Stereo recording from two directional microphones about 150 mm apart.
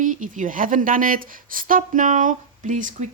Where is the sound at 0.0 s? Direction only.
60° right (ahead or behind).